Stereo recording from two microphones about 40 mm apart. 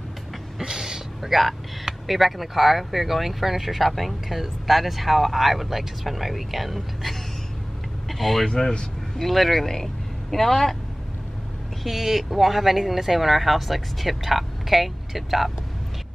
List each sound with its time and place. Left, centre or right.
0.6 s a sound: centre
2.0 s speech: centre
11.8 s speech: centre